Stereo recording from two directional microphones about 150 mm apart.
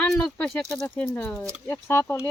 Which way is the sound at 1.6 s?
20° left (ahead or behind).